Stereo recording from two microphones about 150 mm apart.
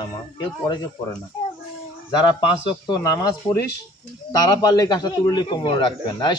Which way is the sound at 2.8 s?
20° left (ahead or behind).